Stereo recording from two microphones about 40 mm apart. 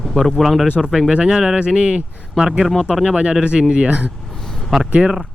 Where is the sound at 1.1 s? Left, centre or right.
Right.